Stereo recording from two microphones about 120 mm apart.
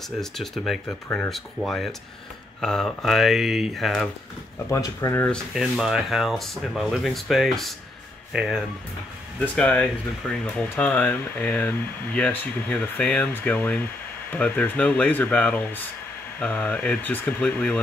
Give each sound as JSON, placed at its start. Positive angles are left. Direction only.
{"t": 0.2, "sound": "speech", "side_deg": 0}
{"t": 1.0, "sound": "speech", "side_deg": 15}
{"t": 1.3, "sound": "speech", "side_deg": 0}
{"t": 4.6, "sound": "speech", "side_deg": 25}
{"t": 5.5, "sound": "speech", "side_deg": 0}
{"t": 9.4, "sound": "speech", "side_deg": 10}